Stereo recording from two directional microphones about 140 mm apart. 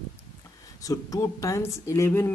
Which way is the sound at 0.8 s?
25° left (ahead or behind).